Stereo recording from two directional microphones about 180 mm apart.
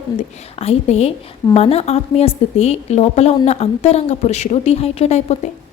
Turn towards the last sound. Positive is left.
turn(degrees=40)  # may be behind; listen again after turning